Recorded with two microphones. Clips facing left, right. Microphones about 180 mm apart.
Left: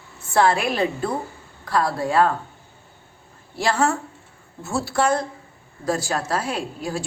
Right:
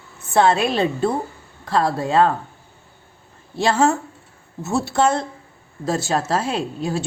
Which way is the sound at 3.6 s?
25° right (ahead or behind).